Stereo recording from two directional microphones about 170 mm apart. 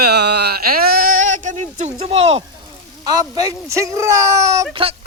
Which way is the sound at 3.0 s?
20° right (ahead or behind).